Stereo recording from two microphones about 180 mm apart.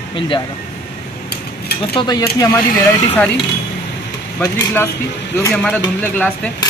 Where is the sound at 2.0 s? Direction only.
25° left (ahead or behind).